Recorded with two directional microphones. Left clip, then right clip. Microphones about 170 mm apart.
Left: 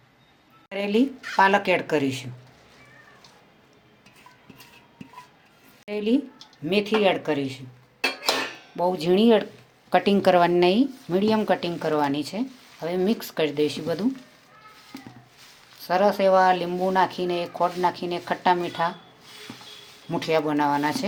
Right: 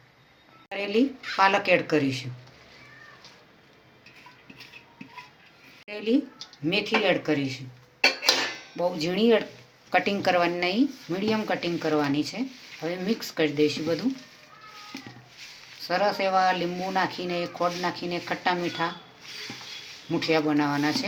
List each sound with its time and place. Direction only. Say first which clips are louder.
0.7 s speech: left 2 dB; 75° left (ahead or behind)
1.4 s speech: left 2 dB; 90° left
5.9 s speech: left 2 dB; 70° left (ahead or behind)
8.7 s speech: left 7 dB; 70° left (ahead or behind)
15.8 s speech: left 4 dB; 70° left (ahead or behind)
20.1 s speech: left 1 dB; 70° left (ahead or behind)